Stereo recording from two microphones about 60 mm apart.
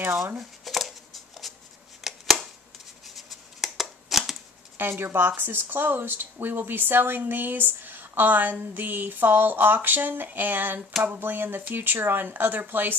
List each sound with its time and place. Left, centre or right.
0.4 s shuffling cards: centre
2.0 s a sound: centre
3.2 s shuffling cards: centre
4.7 s speech: right